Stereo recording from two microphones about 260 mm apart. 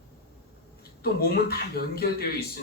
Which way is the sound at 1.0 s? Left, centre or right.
Left.